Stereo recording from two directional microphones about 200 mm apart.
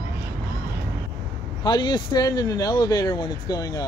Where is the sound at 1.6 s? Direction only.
20° left (ahead or behind).